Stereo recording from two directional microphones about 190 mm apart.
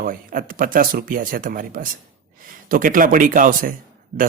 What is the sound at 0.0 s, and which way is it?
A man's voice, 45° right (ahead or behind).